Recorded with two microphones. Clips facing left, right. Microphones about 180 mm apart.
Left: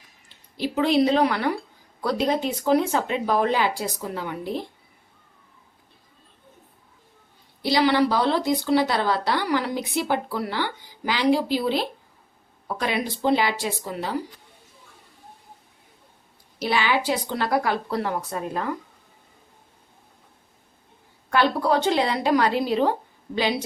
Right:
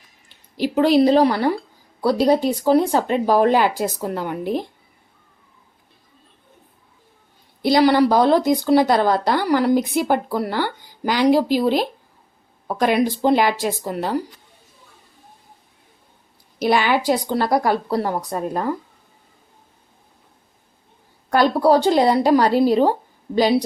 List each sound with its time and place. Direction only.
0.8 s a woman's voice: 40° right (ahead or behind)
7.6 s speech: 50° right (ahead or behind)
16.6 s a woman's voice: 45° right (ahead or behind)
21.2 s a woman's voice: 35° right (ahead or behind)